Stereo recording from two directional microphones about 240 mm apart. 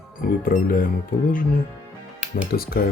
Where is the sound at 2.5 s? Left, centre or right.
Left.